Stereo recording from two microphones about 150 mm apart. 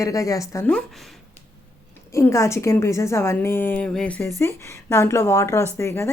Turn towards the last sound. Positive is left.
turn(degrees=20)  # may be behind; listen again after turning